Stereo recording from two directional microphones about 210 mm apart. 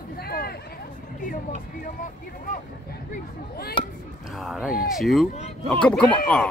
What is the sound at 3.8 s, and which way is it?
Speech, 25° left (ahead or behind).